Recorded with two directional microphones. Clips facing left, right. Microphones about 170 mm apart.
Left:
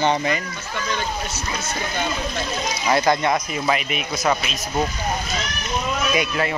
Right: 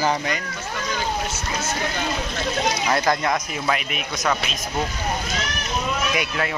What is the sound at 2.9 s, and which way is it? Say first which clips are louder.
A man's voice: left 5 dB; centre (ahead or behind).